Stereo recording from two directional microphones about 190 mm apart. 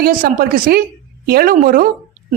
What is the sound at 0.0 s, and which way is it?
A woman's voice, 50° right (ahead or behind).